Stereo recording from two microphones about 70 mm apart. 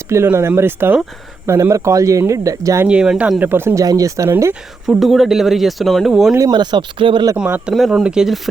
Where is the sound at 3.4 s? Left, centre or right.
Right.